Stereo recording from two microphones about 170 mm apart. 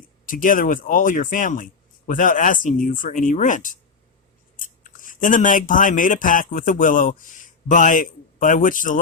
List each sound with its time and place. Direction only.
0.3 s speech: 55° left (ahead or behind)